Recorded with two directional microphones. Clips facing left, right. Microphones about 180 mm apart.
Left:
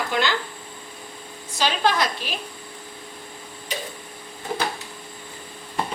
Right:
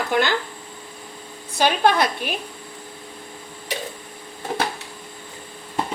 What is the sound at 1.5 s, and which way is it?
Speech, 55° right (ahead or behind).